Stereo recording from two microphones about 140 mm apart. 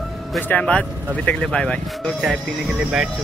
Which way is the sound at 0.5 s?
10° left (ahead or behind).